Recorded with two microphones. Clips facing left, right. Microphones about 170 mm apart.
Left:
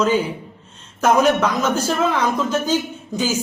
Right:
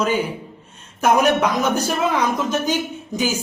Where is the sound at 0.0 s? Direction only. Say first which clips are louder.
Left 2 dB; 10° right (ahead or behind).